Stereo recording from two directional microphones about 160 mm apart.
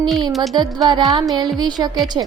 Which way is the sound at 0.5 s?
25° right (ahead or behind).